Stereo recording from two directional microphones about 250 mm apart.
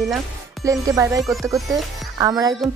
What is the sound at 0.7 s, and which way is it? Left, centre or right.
Speech, centre.